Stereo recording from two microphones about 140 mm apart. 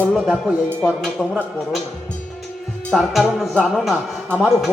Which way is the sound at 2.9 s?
Centre (ahead or behind).